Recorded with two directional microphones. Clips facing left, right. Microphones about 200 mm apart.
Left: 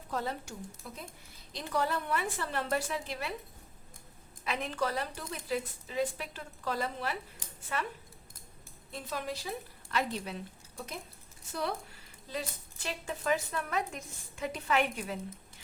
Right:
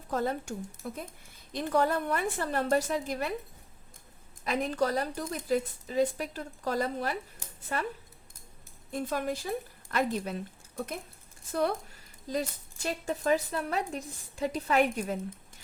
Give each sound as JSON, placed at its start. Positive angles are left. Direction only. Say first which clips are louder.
{"t": 0.1, "sound": "a woman's voice", "louder": "right 5 dB", "side_deg": -50}
{"t": 4.4, "sound": "a woman's voice", "louder": "right 5 dB", "side_deg": -40}
{"t": 8.9, "sound": "a woman's voice", "louder": "right 6 dB", "side_deg": -50}
{"t": 12.3, "sound": "a woman's voice", "louder": "right 6 dB", "side_deg": -40}